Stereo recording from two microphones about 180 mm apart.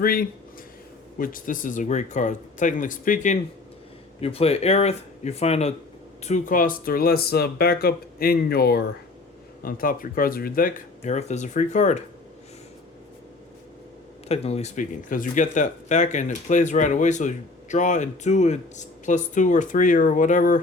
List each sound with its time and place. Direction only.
0.0 s speech: 50° left (ahead or behind)
4.2 s speech: 35° left (ahead or behind)
14.3 s speech: 35° left (ahead or behind)